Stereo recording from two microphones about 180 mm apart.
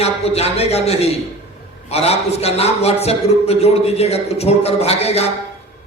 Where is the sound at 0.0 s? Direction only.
35° left (ahead or behind).